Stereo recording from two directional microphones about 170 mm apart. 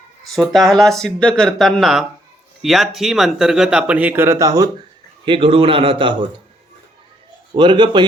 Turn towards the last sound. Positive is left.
turn(degrees=-30)  # may be behind; listen again after turning